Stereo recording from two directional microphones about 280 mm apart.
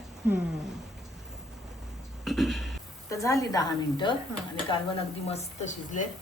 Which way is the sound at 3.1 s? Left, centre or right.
Centre.